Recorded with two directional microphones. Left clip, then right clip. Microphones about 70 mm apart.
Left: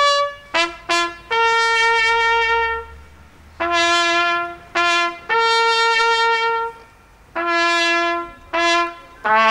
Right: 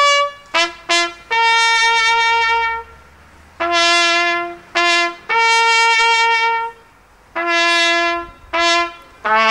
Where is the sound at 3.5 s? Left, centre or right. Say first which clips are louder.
Right 3 dB; centre.